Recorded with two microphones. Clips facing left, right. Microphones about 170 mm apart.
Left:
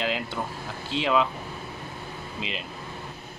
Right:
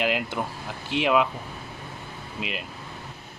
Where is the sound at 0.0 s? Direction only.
15° right (ahead or behind).